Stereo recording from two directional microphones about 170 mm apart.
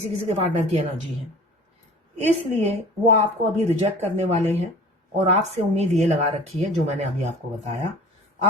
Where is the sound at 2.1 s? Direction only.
40° right (ahead or behind).